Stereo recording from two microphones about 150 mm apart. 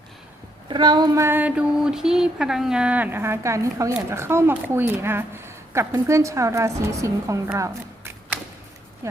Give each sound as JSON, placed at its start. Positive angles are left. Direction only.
{"t": 0.7, "sound": "speech", "side_deg": -30}